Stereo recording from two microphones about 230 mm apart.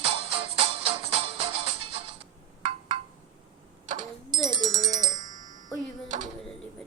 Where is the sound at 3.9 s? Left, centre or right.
Right.